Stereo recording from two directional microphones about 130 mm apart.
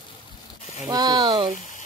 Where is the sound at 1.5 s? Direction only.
75° left (ahead or behind).